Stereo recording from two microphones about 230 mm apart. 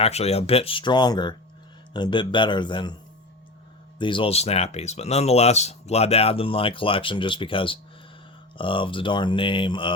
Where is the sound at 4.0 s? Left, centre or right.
Left.